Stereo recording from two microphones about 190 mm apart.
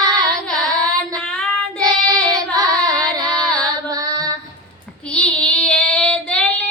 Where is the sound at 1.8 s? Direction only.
20° right (ahead or behind).